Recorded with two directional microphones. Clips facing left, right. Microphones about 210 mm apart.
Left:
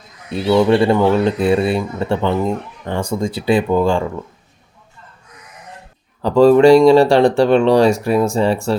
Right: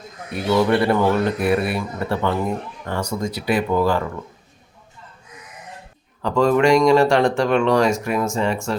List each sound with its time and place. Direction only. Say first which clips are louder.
0.3 s speech: left 5 dB; 25° left (ahead or behind)
6.2 s speech: left 7 dB; 35° left (ahead or behind)